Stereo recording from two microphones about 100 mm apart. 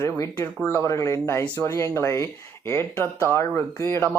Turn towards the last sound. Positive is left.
turn(degrees=25)  # may be behind; listen again after turning